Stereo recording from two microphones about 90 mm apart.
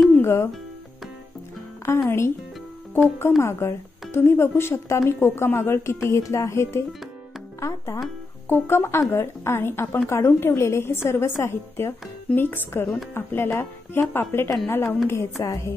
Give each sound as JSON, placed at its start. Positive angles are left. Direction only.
{"t": 0.1, "sound": "music", "side_deg": 30}
{"t": 2.0, "sound": "speech", "side_deg": 30}
{"t": 7.6, "sound": "music", "side_deg": 35}
{"t": 8.5, "sound": "speech", "side_deg": 25}
{"t": 15.4, "sound": "speech", "side_deg": 40}